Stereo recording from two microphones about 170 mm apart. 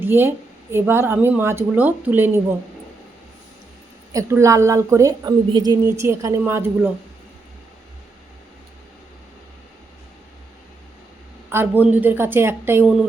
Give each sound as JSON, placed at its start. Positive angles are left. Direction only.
{"t": 0.0, "sound": "a woman's voice", "side_deg": -15}
{"t": 4.1, "sound": "a woman's voice", "side_deg": -15}
{"t": 11.5, "sound": "a woman's voice", "side_deg": -10}